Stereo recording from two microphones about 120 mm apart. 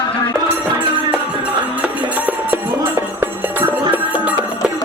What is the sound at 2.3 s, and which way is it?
Music, 15° right (ahead or behind).